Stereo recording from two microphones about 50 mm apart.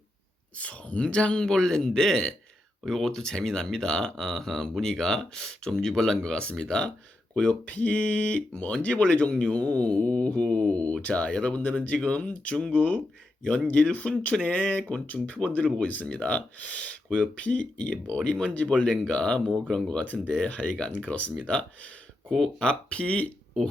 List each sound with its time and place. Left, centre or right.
0.6 s speech: left
7.4 s speech: left
22.3 s speech: centre